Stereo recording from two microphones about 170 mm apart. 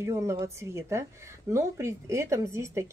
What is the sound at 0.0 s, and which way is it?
A woman's voice, 15° right (ahead or behind).